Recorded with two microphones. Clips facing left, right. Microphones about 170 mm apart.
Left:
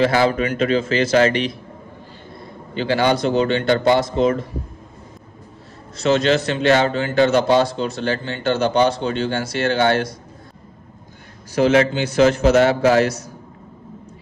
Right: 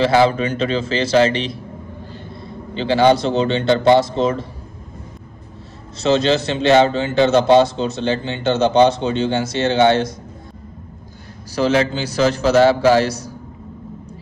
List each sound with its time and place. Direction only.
0.0 s a man's voice: 30° right (ahead or behind)
2.7 s a man's voice: 30° right (ahead or behind)
5.9 s a man's voice: 25° right (ahead or behind)
11.5 s a man's voice: 35° right (ahead or behind)